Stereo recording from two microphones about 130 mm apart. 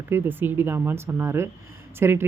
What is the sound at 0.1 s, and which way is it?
Speech, 15° right (ahead or behind).